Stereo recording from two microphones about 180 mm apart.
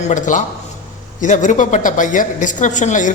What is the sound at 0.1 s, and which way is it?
A man's voice, 45° left (ahead or behind).